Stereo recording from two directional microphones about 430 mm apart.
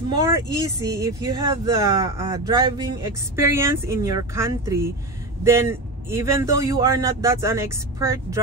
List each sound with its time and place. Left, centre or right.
0.3 s speech: centre